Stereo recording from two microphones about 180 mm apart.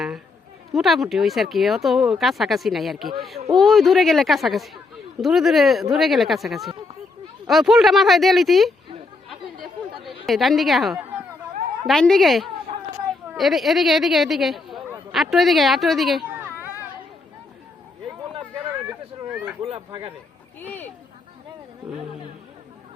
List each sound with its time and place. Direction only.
0.7 s speech: centre (ahead or behind)
10.2 s speech: centre (ahead or behind)
19.6 s speech: 30° right (ahead or behind)
20.6 s speech: 10° left (ahead or behind)